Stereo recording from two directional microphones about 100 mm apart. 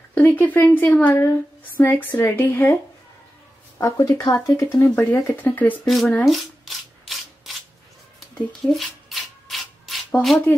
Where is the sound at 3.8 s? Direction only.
35° left (ahead or behind).